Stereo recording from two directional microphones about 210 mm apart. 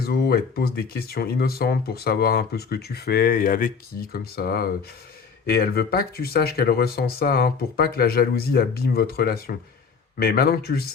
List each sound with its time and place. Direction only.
0.0 s speech: 45° left (ahead or behind)